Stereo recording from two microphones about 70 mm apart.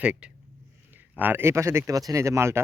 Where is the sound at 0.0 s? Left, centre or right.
Centre.